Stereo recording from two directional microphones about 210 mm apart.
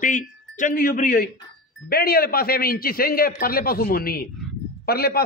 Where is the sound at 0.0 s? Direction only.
40° left (ahead or behind).